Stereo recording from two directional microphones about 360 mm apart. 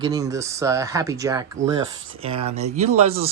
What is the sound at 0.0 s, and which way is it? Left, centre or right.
Speech, centre.